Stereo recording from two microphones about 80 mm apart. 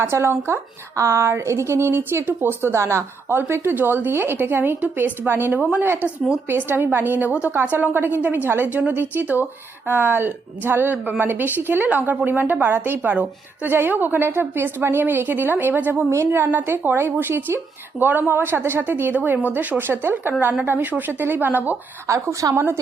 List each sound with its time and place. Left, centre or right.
0.0 s a woman's voice: right
22.0 s a woman's voice: right